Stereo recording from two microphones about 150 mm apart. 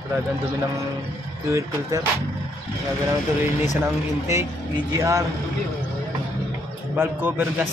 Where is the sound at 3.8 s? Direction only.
20° right (ahead or behind).